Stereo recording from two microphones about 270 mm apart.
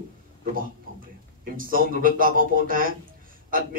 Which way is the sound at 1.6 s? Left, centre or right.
Right.